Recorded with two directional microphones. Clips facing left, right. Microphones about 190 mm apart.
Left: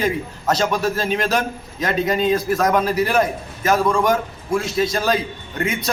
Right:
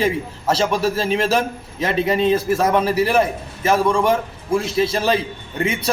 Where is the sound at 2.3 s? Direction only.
10° right (ahead or behind).